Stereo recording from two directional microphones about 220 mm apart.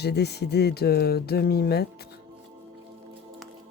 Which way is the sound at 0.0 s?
50° left (ahead or behind).